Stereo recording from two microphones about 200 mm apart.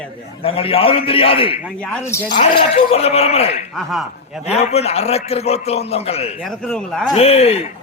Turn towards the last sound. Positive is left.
turn(degrees=30)  # may be behind; listen again after turning